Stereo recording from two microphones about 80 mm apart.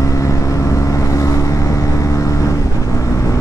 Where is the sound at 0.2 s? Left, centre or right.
Left.